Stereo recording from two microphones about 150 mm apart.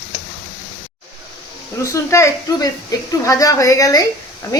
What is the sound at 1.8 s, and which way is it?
A woman's voice, 20° left (ahead or behind).